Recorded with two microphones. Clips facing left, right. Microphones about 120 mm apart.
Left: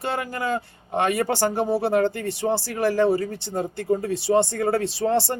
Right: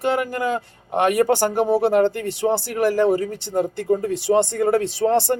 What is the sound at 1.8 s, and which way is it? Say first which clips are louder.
Speech: right 4 dB; 55° right (ahead or behind).